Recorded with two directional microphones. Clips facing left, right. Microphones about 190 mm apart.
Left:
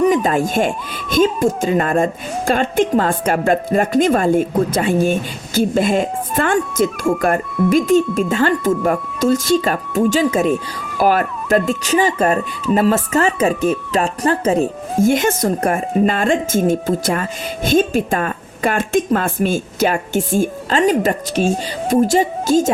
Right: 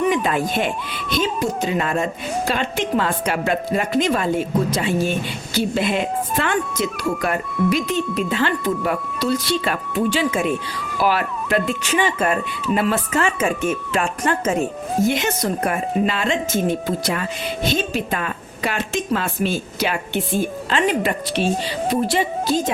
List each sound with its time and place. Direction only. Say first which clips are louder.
0.0 s speech: left 5 dB; 40° left (ahead or behind)